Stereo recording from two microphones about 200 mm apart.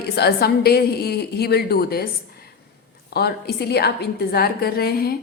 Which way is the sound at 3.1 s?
55° left (ahead or behind).